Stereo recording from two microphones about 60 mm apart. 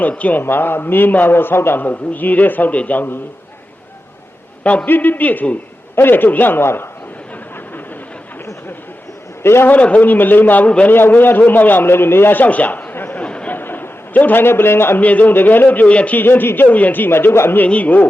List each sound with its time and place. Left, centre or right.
0.2 s a man's voice: left
0.4 s a man's voice: left
1.8 s a man's voice: left
4.9 s a man's voice: left
9.4 s a man's voice: left
9.6 s a man's voice: left
10.9 s a man's voice: left
13.2 s a sound: centre
13.5 s a sound: left
15.0 s a man's voice: left
16.1 s a man's voice: left
17.6 s a man's voice: left